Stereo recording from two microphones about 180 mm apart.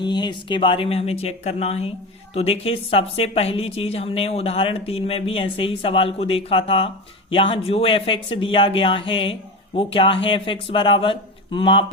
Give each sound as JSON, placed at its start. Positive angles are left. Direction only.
{"t": 0.0, "sound": "a woman's voice", "side_deg": 25}